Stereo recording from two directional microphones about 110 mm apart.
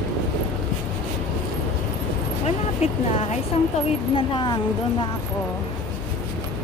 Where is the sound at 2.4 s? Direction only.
85° left.